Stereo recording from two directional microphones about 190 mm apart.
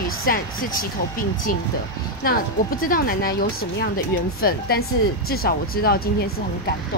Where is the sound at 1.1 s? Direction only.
50° left (ahead or behind).